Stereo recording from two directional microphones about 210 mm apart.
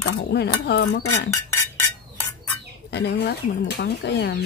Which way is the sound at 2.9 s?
55° left (ahead or behind).